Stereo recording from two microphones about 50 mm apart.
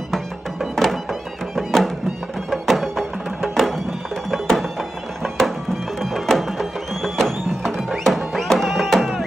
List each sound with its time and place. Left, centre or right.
0.1 s music: centre
5.9 s music: centre